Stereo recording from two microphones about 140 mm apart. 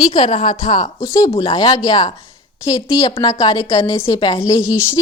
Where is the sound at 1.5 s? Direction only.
35° left (ahead or behind).